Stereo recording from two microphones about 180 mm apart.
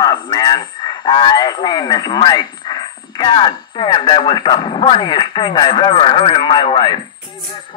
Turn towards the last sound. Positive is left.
turn(degrees=25)  # may be behind; listen again after turning